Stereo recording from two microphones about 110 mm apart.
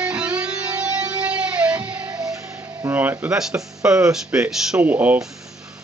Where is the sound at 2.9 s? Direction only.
15° right (ahead or behind).